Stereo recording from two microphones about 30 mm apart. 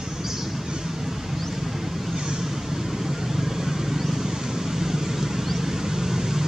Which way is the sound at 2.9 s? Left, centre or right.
Centre.